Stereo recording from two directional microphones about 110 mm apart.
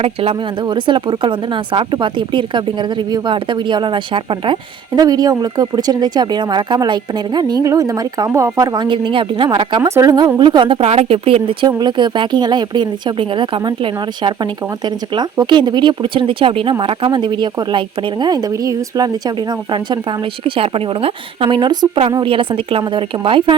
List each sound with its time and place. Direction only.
0.0 s speech: 60° right (ahead or behind)
0.6 s a woman's voice: 45° right (ahead or behind)
4.9 s a woman's voice: 35° right (ahead or behind)
9.9 s a woman's voice: 30° right (ahead or behind)
10.3 s a woman's voice: 40° right (ahead or behind)
10.8 s speech: 70° right (ahead or behind)
11.8 s a woman's voice: 45° right (ahead or behind)